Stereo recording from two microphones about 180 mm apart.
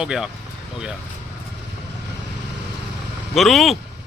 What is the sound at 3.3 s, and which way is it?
Speech, centre (ahead or behind).